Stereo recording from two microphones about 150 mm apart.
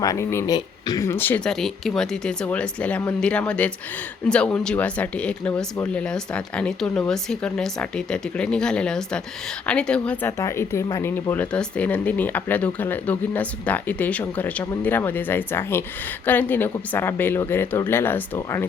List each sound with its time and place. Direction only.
0.0 s speech: 20° left (ahead or behind)
1.5 s speech: centre (ahead or behind)
10.3 s speech: 20° left (ahead or behind)